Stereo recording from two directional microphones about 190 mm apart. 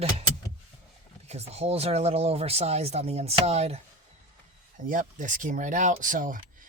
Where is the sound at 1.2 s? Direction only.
35° right (ahead or behind).